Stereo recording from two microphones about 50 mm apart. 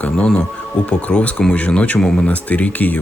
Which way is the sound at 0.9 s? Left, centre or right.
Left.